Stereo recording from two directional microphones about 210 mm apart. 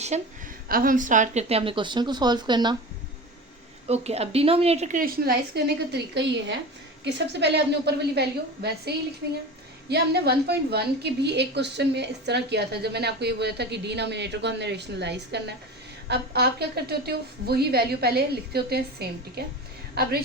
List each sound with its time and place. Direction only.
0.1 s a woman's voice: 35° right (ahead or behind)
3.8 s a woman's voice: 30° right (ahead or behind); by 20.1 s 50° right (ahead or behind)